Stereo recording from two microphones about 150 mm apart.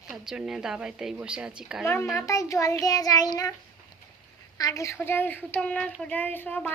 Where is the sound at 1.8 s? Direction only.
15° left (ahead or behind).